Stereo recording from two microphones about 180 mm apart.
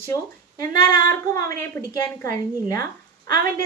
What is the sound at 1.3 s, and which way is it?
A woman's voice, 15° left (ahead or behind).